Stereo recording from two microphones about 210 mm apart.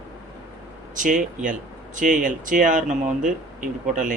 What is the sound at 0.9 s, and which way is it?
Speech, 40° right (ahead or behind).